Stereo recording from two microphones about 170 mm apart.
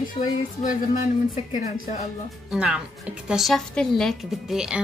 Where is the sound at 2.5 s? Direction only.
5° right (ahead or behind).